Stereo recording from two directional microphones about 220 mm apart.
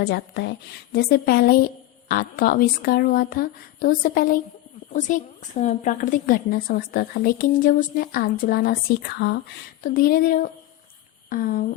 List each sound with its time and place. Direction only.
0.0 s a woman's voice: 50° left (ahead or behind)